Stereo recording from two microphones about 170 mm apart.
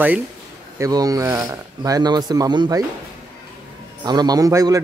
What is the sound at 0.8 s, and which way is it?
Speech, 20° right (ahead or behind).